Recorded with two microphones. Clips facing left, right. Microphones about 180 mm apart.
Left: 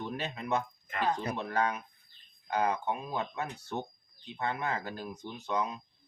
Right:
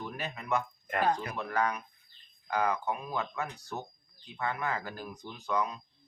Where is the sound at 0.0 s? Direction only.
25° left (ahead or behind).